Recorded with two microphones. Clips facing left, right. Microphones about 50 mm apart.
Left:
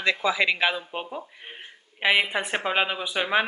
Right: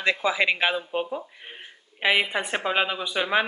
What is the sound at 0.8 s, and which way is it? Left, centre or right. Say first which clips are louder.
Speech: right 5 dB; centre.